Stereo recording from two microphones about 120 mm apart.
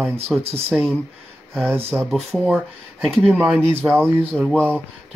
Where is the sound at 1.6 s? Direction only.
15° right (ahead or behind).